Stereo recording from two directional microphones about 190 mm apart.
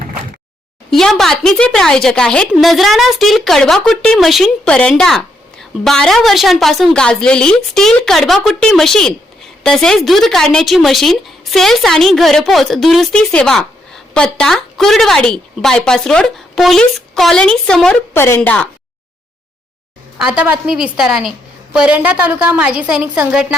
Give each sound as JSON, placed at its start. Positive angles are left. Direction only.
{"t": 0.9, "sound": "speech", "side_deg": 0}
{"t": 20.1, "sound": "speech", "side_deg": -5}